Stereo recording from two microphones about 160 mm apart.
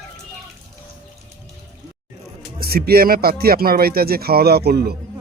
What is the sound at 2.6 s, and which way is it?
Speech, 70° right (ahead or behind).